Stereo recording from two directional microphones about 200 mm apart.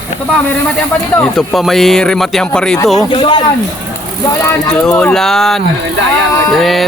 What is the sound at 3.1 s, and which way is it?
Speech, 25° left (ahead or behind).